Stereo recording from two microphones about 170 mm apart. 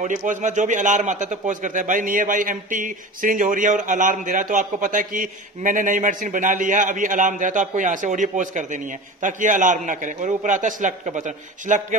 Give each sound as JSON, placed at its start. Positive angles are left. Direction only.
{"t": 0.0, "sound": "a man's voice", "side_deg": -50}